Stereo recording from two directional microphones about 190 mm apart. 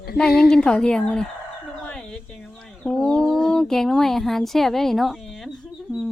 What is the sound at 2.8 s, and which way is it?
Speech, 5° left (ahead or behind).